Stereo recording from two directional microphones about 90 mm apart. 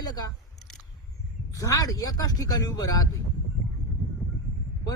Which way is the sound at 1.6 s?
40° left (ahead or behind).